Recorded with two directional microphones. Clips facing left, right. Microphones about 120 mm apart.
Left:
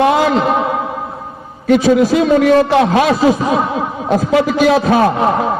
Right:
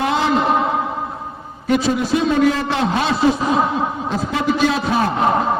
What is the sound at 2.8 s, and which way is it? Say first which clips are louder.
Speech: left 6 dB; 90° left.